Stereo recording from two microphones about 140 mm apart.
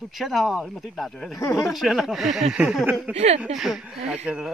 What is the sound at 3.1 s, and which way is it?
Speech, 50° right (ahead or behind).